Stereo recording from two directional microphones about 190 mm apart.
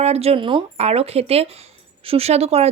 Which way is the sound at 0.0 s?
35° right (ahead or behind).